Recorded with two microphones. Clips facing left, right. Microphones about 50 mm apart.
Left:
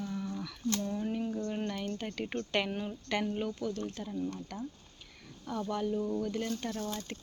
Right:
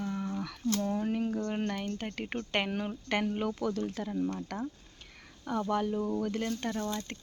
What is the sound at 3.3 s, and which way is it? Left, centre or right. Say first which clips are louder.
Speech: right 3 dB; right.